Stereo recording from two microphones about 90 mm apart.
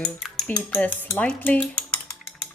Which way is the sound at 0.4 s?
15° left (ahead or behind).